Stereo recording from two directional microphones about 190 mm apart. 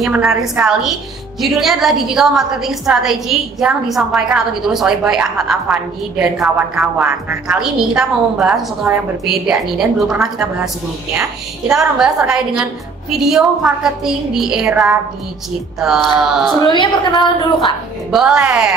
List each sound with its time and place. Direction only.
0.0 s a woman's voice: 5° right (ahead or behind)
11.7 s a woman's voice: 5° right (ahead or behind)
16.6 s a woman's voice: 25° left (ahead or behind)
18.1 s a woman's voice: 5° right (ahead or behind)